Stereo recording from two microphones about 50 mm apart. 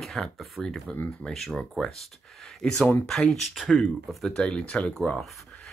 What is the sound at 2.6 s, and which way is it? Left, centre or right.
Speech, left.